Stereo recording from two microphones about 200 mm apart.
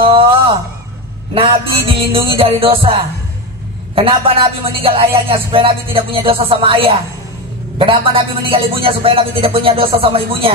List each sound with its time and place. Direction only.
0.0 s a sound: 25° right (ahead or behind)
1.3 s speech: 25° right (ahead or behind)
3.9 s speech: 25° right (ahead or behind)